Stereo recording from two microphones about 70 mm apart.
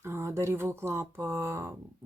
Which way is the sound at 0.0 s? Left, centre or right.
Right.